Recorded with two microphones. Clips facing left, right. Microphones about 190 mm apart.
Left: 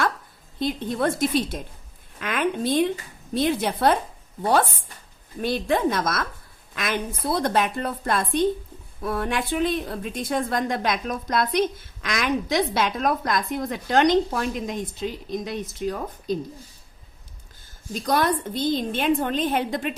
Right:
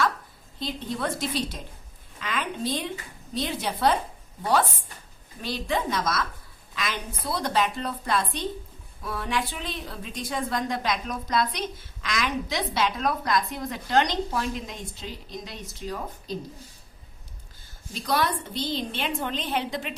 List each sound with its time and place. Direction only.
0.6 s a woman's voice: 55° left (ahead or behind)
5.4 s a woman's voice: 55° left (ahead or behind)
17.9 s a woman's voice: 45° left (ahead or behind)